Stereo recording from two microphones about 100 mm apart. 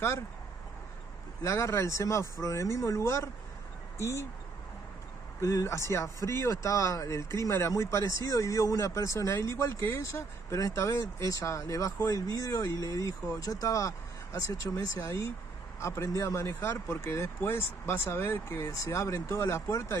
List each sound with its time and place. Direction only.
1.4 s speech: 30° left (ahead or behind)
5.4 s speech: 30° left (ahead or behind)
15.0 s speech: 25° left (ahead or behind)